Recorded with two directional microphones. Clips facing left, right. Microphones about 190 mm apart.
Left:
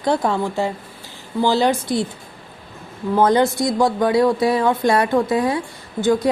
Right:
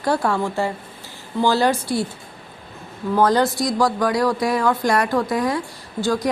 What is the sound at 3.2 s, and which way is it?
Speech, 20° left (ahead or behind).